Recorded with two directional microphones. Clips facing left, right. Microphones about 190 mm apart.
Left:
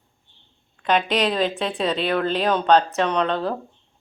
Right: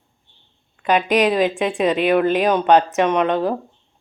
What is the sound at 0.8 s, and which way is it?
A woman's voice, 10° right (ahead or behind).